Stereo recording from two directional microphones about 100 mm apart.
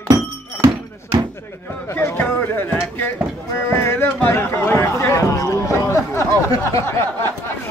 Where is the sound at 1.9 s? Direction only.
25° left (ahead or behind).